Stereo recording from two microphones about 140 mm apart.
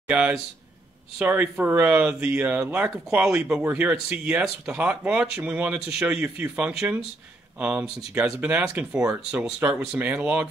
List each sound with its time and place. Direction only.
0.1 s speech: 10° right (ahead or behind)